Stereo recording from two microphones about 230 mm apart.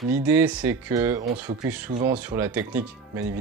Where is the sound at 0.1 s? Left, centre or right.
Centre.